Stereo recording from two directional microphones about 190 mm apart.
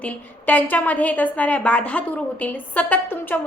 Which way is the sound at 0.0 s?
10° left (ahead or behind).